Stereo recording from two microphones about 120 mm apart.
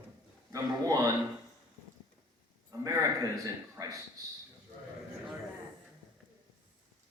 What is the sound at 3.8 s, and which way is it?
Speech, 30° right (ahead or behind).